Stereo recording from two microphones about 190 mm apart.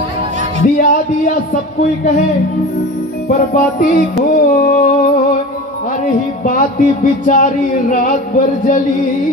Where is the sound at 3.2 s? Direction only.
45° left (ahead or behind).